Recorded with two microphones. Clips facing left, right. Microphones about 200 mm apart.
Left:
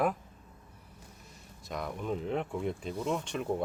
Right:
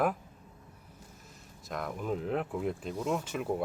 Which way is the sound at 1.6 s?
Centre (ahead or behind).